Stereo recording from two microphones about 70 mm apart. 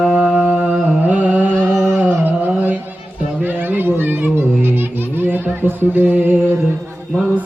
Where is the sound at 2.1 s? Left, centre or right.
Right.